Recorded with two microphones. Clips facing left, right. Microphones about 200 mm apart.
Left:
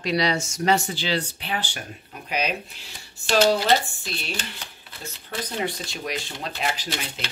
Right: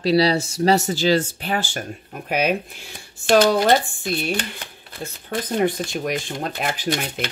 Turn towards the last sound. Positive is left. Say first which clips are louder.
# right 8 dB
turn(degrees=-55)  # may be behind; listen again after turning